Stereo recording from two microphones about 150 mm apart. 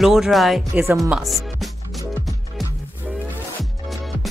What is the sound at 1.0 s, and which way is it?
Music, centre (ahead or behind).